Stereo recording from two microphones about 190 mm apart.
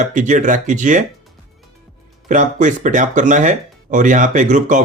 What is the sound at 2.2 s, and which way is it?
Speech, 40° right (ahead or behind).